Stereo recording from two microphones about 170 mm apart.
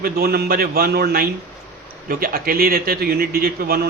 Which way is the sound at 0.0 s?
65° right (ahead or behind).